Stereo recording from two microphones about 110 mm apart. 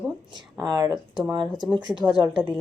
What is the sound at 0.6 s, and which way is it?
Speech, 35° right (ahead or behind).